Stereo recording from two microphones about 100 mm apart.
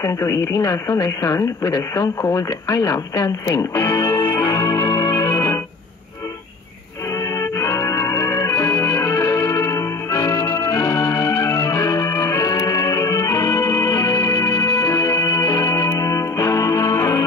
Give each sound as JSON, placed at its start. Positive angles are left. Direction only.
{"t": 0.0, "sound": "speech", "side_deg": 30}
{"t": 7.3, "sound": "music", "side_deg": 30}